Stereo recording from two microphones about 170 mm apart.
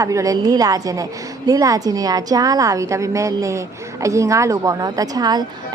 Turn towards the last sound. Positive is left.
turn(degrees=-25)  # may be behind; listen again after turning